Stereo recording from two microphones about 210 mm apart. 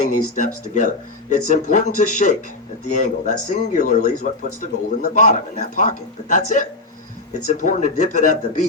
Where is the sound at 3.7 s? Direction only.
40° left (ahead or behind).